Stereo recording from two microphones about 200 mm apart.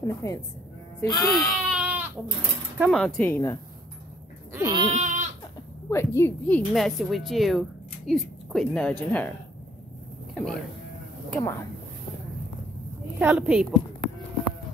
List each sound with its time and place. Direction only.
0.0 s speech: 15° left (ahead or behind)
1.3 s baby cry: centre (ahead or behind)
2.8 s speech: centre (ahead or behind)
4.6 s goat: 20° right (ahead or behind)
4.9 s goat: 35° right (ahead or behind)
5.9 s a woman's voice: 10° left (ahead or behind)
10.3 s speech: 5° left (ahead or behind)
13.2 s a woman's voice: 10° right (ahead or behind)